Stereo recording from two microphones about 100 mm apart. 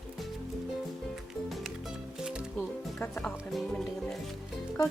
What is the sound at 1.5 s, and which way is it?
Music, centre (ahead or behind).